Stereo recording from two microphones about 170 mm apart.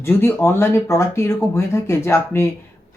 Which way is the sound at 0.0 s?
15° left (ahead or behind).